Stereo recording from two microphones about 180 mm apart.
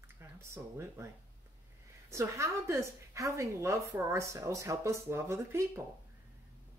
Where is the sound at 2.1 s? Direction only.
15° right (ahead or behind).